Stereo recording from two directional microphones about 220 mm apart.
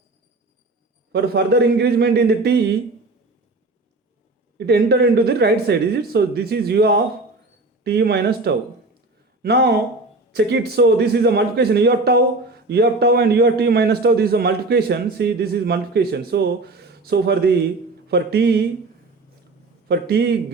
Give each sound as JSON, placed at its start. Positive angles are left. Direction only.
{"t": 1.1, "sound": "a man's voice", "side_deg": -45}
{"t": 4.5, "sound": "a man's voice", "side_deg": -45}
{"t": 19.9, "sound": "a man's voice", "side_deg": -45}